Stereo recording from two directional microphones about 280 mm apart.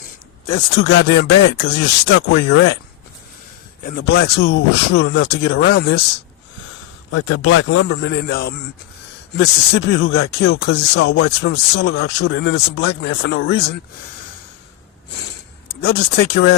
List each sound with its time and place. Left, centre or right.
0.4 s speech: left
3.8 s speech: left
7.1 s a man's voice: left
15.8 s speech: left